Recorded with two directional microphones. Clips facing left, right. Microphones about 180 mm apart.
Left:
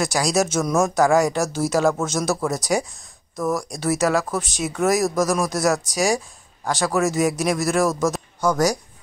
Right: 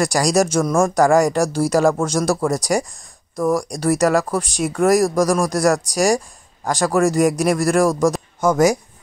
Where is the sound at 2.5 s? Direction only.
5° left (ahead or behind).